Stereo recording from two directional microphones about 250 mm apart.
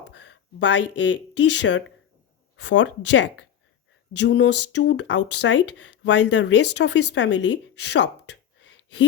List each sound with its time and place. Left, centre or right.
0.2 s speech: left